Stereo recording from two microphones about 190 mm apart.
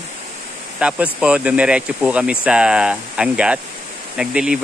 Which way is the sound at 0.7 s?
5° right (ahead or behind).